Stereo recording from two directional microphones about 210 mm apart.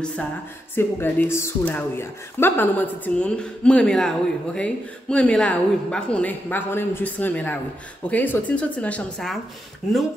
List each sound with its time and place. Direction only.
0.0 s a woman's voice: 5° left (ahead or behind)